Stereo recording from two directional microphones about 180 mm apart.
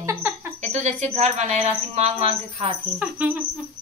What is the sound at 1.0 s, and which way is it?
Speech, 40° right (ahead or behind).